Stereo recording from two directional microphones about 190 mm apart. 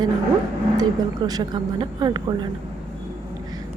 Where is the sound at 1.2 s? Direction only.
20° right (ahead or behind).